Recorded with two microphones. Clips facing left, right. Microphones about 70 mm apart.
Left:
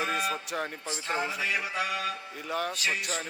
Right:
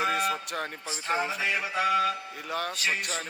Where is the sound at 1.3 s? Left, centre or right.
Right.